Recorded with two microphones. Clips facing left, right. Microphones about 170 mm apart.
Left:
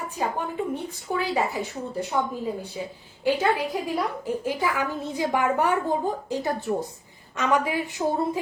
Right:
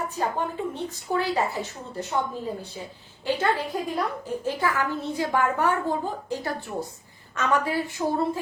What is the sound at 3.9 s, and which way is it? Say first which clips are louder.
A woman's voice: left 1 dB; 10° left (ahead or behind).